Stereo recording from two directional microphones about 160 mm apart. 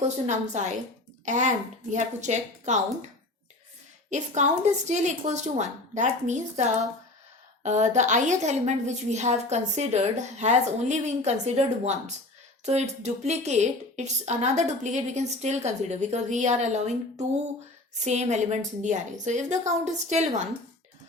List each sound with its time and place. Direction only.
0.3 s a woman's voice: 50° right (ahead or behind)
4.1 s a woman's voice: 45° right (ahead or behind)